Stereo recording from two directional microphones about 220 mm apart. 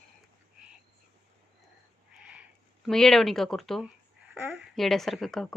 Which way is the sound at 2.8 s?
Centre (ahead or behind).